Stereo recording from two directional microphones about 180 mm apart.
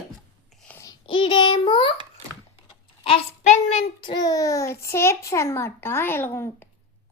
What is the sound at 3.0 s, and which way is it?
Speech, 35° left (ahead or behind).